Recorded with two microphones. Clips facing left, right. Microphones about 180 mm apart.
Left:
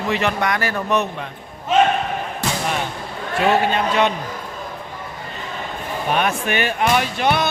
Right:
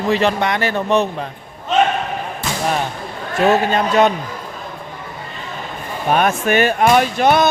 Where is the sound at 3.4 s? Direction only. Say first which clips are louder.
Right 3 dB; 45° right (ahead or behind).